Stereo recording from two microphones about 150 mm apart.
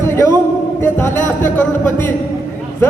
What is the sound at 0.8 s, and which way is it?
A man's voice, 15° left (ahead or behind).